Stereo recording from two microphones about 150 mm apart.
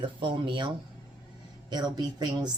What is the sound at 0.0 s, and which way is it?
Speech, 35° right (ahead or behind).